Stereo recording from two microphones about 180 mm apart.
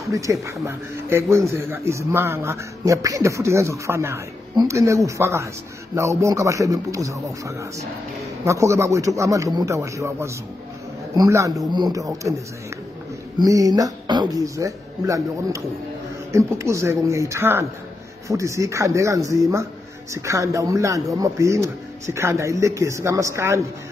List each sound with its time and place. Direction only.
0.1 s a man's voice: 15° right (ahead or behind)
13.4 s a man's voice: 20° right (ahead or behind)